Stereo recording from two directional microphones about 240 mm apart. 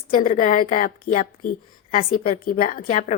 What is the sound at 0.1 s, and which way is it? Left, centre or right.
A woman's voice, left.